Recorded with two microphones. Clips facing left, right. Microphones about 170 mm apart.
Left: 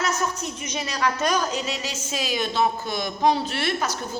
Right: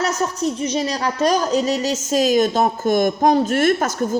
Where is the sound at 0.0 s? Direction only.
35° right (ahead or behind).